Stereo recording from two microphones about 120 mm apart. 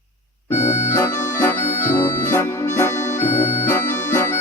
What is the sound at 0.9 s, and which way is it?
Music, 20° left (ahead or behind).